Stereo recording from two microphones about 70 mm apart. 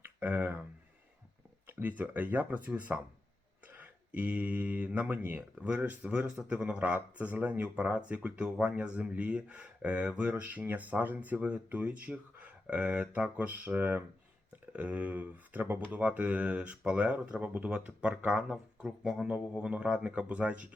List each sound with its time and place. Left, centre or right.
0.0 s speech: right
1.6 s speech: right